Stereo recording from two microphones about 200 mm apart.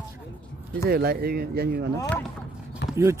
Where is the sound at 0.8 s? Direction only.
50° right (ahead or behind).